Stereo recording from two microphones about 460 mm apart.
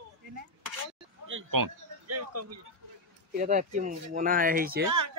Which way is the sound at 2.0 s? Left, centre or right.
Right.